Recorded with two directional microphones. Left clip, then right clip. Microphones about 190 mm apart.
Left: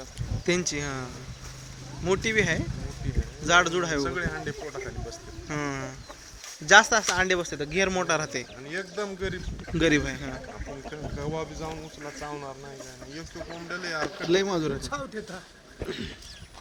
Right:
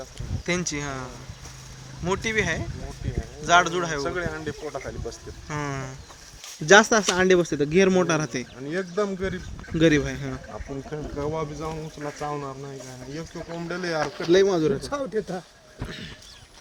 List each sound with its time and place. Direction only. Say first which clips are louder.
0.4 s speech: even; centre (ahead or behind)
2.0 s speech: even; 5° left (ahead or behind)
4.0 s speech: right 2 dB; 25° right (ahead or behind)
5.5 s speech: right 1 dB; 5° left (ahead or behind)
6.7 s speech: right 2 dB; 5° right (ahead or behind)
8.7 s speech: right 6 dB; 25° right (ahead or behind)
9.7 s speech: right 3 dB; 5° left (ahead or behind)
10.9 s speech: right 5 dB; 30° right (ahead or behind)
13.7 s speech: right 4 dB; 20° right (ahead or behind)
14.3 s speech: right 6 dB; 5° right (ahead or behind)
14.8 s speech: right 6 dB; 45° right (ahead or behind)
15.9 s speech: left 3 dB; centre (ahead or behind)